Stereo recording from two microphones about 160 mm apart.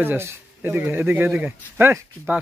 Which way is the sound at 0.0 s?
15° right (ahead or behind).